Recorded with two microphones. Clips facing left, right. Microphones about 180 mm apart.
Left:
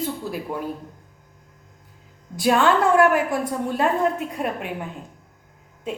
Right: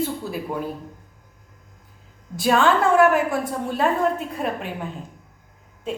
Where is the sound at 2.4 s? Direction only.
Centre (ahead or behind).